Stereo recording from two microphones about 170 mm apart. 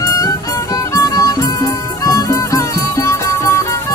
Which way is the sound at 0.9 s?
20° left (ahead or behind).